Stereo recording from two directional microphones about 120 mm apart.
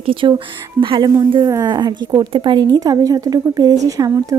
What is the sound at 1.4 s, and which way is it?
A woman's voice, 30° right (ahead or behind).